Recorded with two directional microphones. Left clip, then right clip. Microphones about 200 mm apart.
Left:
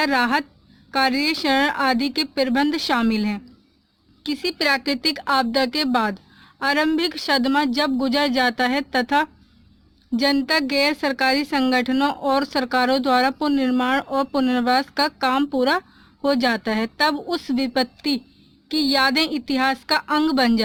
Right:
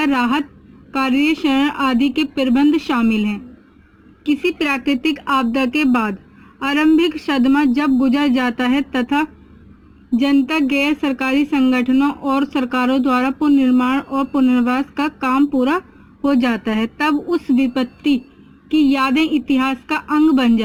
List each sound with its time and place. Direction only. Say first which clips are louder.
0.1 s a woman's voice: right 2 dB; 45° left (ahead or behind)
5.1 s speech: right 2 dB; 35° left (ahead or behind)
10.2 s a woman's voice: right 2 dB; 45° left (ahead or behind)